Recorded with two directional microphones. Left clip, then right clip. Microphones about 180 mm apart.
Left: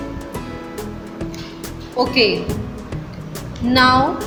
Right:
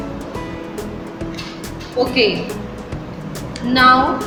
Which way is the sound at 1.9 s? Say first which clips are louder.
Even; 50° left (ahead or behind).